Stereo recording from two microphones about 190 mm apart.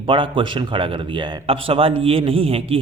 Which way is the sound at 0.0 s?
25° right (ahead or behind).